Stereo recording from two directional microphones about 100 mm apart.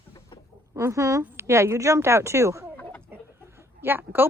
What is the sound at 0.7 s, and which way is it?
A woman's voice, 30° right (ahead or behind).